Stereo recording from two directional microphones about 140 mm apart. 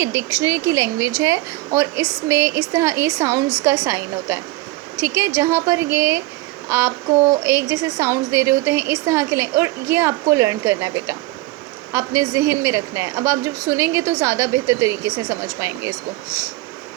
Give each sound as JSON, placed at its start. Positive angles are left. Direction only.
{"t": 0.0, "sound": "speech", "side_deg": -20}